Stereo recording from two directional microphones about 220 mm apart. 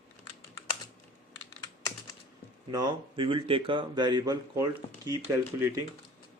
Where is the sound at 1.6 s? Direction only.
15° left (ahead or behind).